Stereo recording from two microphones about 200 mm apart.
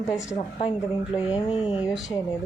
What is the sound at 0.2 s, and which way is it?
Speech, 15° left (ahead or behind).